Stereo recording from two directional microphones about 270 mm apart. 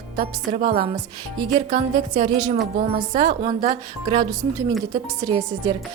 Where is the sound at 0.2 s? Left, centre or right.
Right.